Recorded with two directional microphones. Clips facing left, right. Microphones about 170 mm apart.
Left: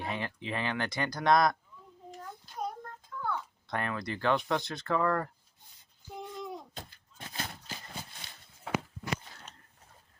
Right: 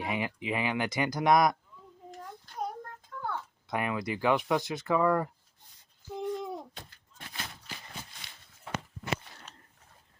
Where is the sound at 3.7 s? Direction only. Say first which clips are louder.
Right 3 dB; 10° right (ahead or behind).